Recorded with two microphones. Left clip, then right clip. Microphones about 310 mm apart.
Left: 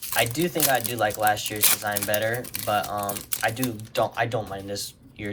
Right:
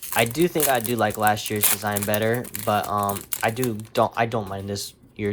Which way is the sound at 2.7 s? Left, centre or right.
Centre.